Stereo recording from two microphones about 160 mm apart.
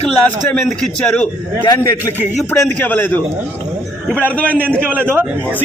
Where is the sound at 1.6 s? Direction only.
25° left (ahead or behind).